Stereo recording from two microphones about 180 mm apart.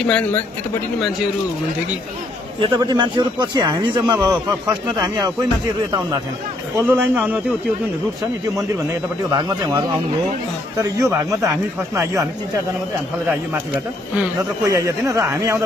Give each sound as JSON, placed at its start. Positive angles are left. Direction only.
{"t": 0.0, "sound": "speech", "side_deg": 10}
{"t": 2.6, "sound": "a man's voice", "side_deg": -25}
{"t": 6.8, "sound": "speech", "side_deg": -10}
{"t": 9.3, "sound": "a man's voice", "side_deg": -20}
{"t": 14.6, "sound": "speech", "side_deg": -15}